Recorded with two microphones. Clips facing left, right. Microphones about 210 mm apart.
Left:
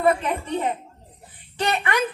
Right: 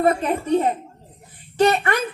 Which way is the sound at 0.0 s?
40° right (ahead or behind).